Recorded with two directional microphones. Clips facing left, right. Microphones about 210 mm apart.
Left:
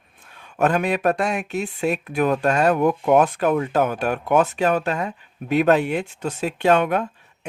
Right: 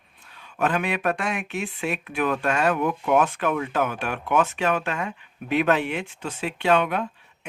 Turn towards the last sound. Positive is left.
turn(degrees=45)  # may be behind; listen again after turning